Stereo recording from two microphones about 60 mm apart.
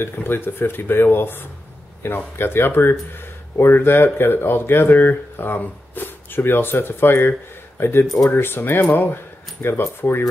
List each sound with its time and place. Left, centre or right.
0.0 s speech: left